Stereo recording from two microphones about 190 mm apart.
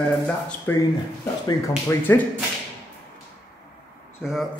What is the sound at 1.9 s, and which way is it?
Speech, 10° left (ahead or behind).